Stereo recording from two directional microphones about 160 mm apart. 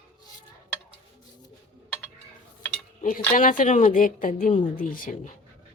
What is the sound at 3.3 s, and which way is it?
A woman's voice, 55° left (ahead or behind).